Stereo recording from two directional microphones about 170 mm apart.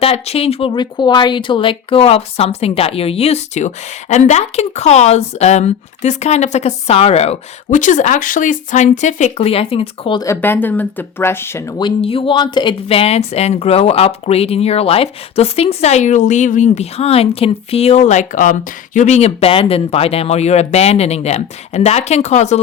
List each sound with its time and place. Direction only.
0.0 s speech: 35° left (ahead or behind)
10.2 s speech: 15° left (ahead or behind); by 22.6 s 40° left (ahead or behind)